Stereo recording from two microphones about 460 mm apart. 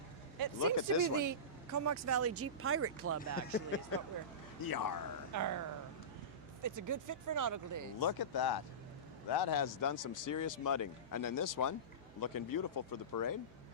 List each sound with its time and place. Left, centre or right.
0.6 s speech: left
1.1 s speech: right
3.3 s speech: left
4.6 s speech: left
5.3 s speech: right
7.9 s speech: left